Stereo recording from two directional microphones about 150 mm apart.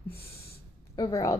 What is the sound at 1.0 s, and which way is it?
Speech, 25° left (ahead or behind).